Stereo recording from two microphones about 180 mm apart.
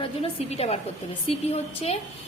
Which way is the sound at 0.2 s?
35° left (ahead or behind).